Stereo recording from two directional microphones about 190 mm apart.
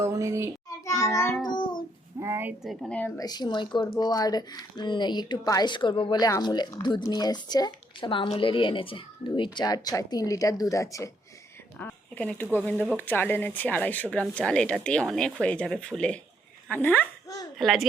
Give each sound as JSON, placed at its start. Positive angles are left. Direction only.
{"t": 0.0, "sound": "child singing", "side_deg": -15}
{"t": 0.9, "sound": "child singing", "side_deg": 15}
{"t": 1.5, "sound": "a sound", "side_deg": 25}
{"t": 2.1, "sound": "a woman's voice", "side_deg": -15}
{"t": 3.2, "sound": "a woman's voice", "side_deg": 20}